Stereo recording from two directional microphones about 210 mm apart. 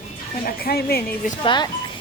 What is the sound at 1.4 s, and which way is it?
Speech, 20° left (ahead or behind).